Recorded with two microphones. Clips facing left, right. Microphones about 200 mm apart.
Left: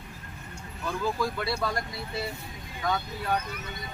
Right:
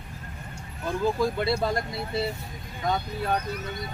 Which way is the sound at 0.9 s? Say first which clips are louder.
Right 4 dB; 20° right (ahead or behind).